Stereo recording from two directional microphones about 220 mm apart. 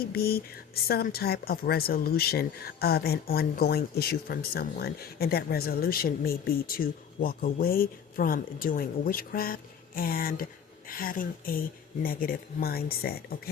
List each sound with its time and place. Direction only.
0.1 s speech: 45° left (ahead or behind)